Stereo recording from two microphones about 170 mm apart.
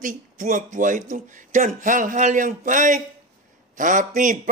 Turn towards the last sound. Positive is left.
turn(degrees=-50)  # may be behind; listen again after turning